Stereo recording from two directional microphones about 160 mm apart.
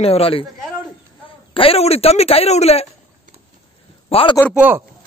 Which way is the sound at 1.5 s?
35° left (ahead or behind).